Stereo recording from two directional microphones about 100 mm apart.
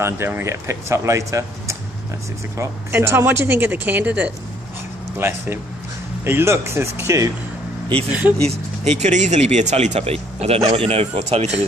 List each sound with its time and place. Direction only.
0.0 s speech: 25° right (ahead or behind)
5.1 s speech: 25° right (ahead or behind)
8.1 s speech: 15° right (ahead or behind)
8.5 s speech: 90° right